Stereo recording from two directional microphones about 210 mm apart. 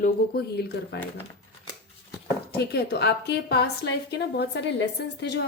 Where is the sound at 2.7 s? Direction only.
50° left (ahead or behind).